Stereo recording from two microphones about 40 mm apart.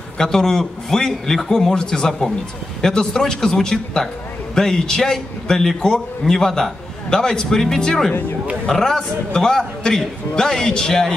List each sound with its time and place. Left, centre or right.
0.2 s a man's voice: centre